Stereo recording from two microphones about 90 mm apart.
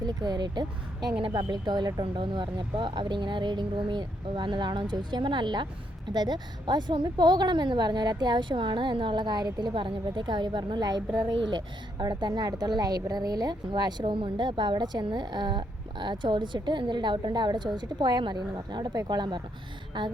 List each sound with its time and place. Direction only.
0.0 s a woman's voice: 50° right (ahead or behind)
2.0 s a woman's voice: 65° right (ahead or behind)
19.9 s a sound: 60° right (ahead or behind)